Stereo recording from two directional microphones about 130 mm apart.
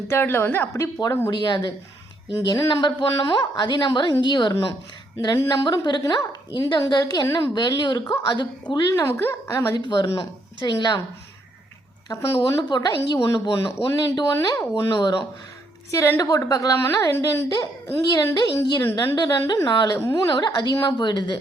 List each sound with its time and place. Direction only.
0.1 s a woman's voice: 20° left (ahead or behind)
1.3 s a woman's voice: 35° left (ahead or behind)
8.7 s a woman's voice: 25° left (ahead or behind)
12.0 s a woman's voice: 20° left (ahead or behind)
12.4 s a woman's voice: 35° left (ahead or behind)
18.8 s a woman's voice: 20° left (ahead or behind)
19.1 s a woman's voice: 35° left (ahead or behind)